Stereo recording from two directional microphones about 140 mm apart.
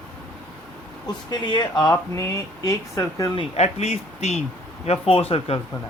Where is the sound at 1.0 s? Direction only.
30° left (ahead or behind).